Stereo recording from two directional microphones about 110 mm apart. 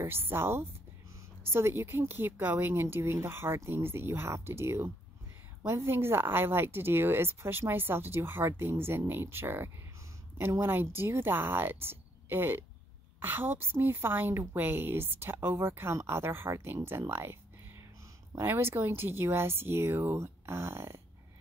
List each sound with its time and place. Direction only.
0.0 s speech: 20° right (ahead or behind)
17.1 s a sound: 20° right (ahead or behind)
18.3 s speech: 20° right (ahead or behind)